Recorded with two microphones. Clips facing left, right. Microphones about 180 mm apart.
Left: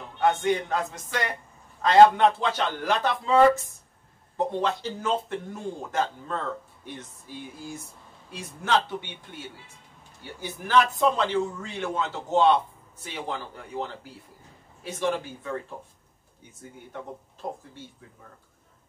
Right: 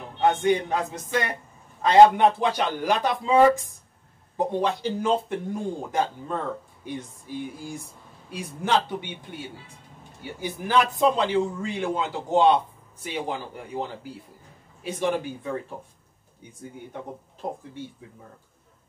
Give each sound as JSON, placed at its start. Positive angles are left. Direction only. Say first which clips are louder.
{"t": 0.2, "sound": "a man's voice", "louder": "right 2 dB", "side_deg": -15}
{"t": 8.3, "sound": "a man's voice", "louder": "right 1 dB", "side_deg": -15}
{"t": 16.9, "sound": "a man's voice", "louder": "right 1 dB", "side_deg": -15}